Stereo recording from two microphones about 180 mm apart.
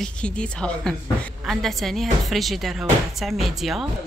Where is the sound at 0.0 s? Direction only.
5° left (ahead or behind).